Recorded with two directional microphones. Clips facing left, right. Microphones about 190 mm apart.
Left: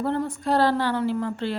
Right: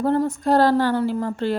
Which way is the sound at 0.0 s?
40° right (ahead or behind).